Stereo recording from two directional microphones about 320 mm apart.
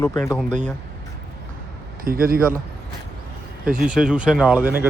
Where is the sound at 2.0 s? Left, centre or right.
Right.